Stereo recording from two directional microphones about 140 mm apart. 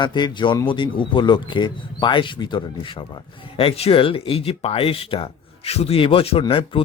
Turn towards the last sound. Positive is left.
turn(degrees=40)  # may be behind; listen again after turning